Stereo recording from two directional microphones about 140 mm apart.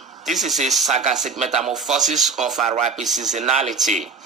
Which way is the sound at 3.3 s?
55° right (ahead or behind).